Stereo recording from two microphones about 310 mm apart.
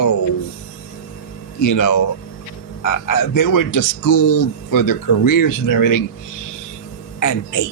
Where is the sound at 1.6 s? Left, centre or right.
Left.